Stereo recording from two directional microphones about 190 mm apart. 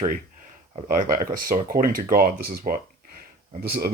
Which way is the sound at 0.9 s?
50° right (ahead or behind).